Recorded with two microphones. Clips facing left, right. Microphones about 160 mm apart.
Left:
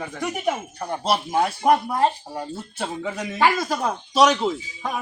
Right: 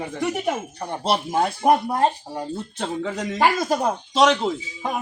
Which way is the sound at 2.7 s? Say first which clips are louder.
Right 1 dB; 10° left (ahead or behind).